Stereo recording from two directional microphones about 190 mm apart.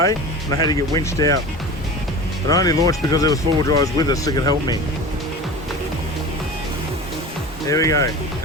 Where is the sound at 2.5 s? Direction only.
20° left (ahead or behind).